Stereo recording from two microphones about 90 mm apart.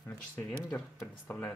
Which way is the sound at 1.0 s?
30° left (ahead or behind).